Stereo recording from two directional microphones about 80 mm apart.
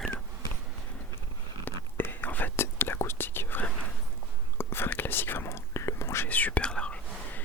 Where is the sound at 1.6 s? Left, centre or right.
Left.